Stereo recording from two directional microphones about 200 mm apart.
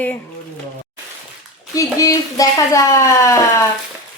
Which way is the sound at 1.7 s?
15° left (ahead or behind).